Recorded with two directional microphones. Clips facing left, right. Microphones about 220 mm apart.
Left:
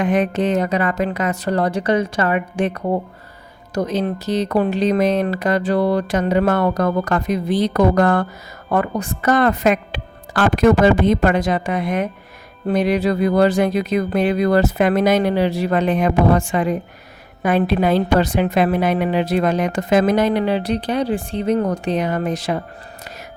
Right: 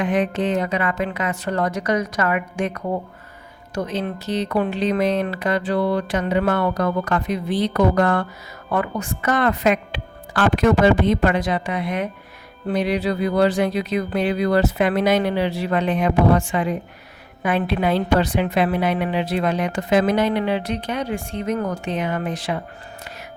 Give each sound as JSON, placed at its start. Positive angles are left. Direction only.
{"t": 0.0, "sound": "a woman's voice", "side_deg": 40}